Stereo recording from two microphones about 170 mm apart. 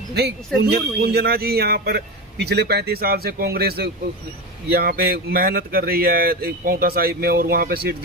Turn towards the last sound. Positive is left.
turn(degrees=-65)  # may be behind; listen again after turning